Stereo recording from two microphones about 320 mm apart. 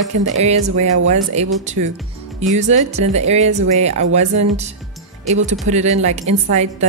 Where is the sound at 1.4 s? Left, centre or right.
Right.